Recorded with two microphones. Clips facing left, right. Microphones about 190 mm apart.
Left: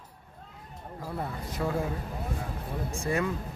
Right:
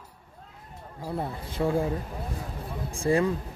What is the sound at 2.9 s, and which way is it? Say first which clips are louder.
Speech: right 6 dB; 30° right (ahead or behind).